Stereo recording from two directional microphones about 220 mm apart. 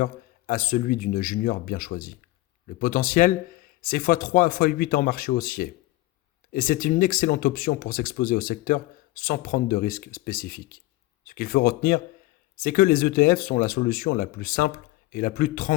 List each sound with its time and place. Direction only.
0.0 s speech: 35° left (ahead or behind)